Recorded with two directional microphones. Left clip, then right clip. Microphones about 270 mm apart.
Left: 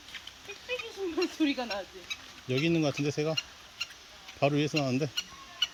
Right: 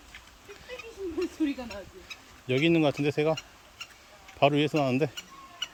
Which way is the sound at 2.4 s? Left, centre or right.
Centre.